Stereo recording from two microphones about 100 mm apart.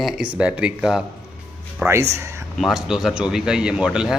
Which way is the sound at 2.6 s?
5° right (ahead or behind).